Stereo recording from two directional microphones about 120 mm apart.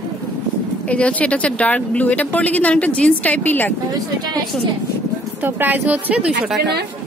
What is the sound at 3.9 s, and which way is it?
Speech, 35° right (ahead or behind).